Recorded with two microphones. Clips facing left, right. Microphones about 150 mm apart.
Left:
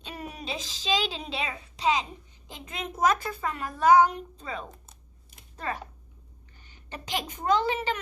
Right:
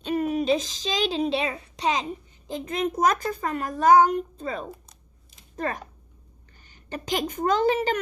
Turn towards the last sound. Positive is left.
turn(degrees=-45)  # may be behind; listen again after turning